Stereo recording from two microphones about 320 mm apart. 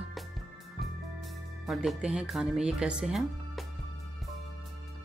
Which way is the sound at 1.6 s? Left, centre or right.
Centre.